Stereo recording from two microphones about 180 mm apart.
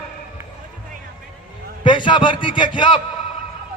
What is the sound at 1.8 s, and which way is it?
A man's voice, 25° left (ahead or behind).